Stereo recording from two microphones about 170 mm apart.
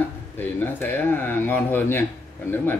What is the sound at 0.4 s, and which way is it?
Speech, 10° left (ahead or behind).